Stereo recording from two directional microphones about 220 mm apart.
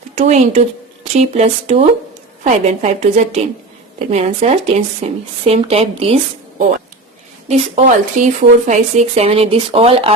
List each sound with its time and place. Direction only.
0.2 s a woman's voice: 30° right (ahead or behind)
7.4 s speech: 30° right (ahead or behind)